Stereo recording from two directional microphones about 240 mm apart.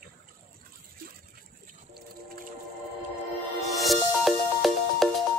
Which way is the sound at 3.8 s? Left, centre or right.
Centre.